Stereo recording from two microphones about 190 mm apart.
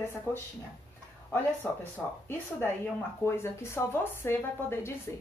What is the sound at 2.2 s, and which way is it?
A woman's voice, 10° left (ahead or behind).